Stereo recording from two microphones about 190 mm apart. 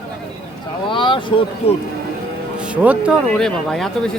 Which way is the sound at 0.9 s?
25° left (ahead or behind).